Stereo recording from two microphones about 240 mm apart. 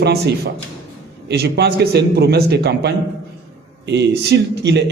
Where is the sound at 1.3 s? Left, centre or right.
Right.